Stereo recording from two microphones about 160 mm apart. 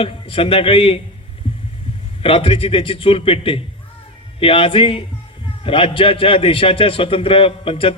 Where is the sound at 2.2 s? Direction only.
35° left (ahead or behind).